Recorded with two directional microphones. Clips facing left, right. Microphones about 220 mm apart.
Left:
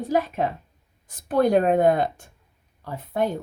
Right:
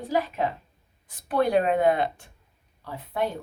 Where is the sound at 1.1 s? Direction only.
45° left (ahead or behind).